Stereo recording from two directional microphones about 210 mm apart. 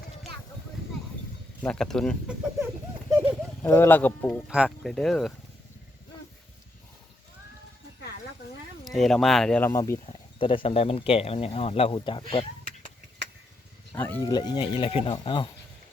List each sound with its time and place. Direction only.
1.6 s speech: 5° left (ahead or behind)
3.6 s speech: 10° left (ahead or behind)
4.4 s speech: 5° right (ahead or behind)
8.8 s speech: centre (ahead or behind)
10.1 s speech: 25° left (ahead or behind)
12.3 s a sound: 25° left (ahead or behind)
13.9 s speech: 10° left (ahead or behind)
14.3 s speech: 20° left (ahead or behind)